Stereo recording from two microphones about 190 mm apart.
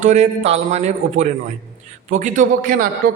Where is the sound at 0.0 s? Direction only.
35° right (ahead or behind).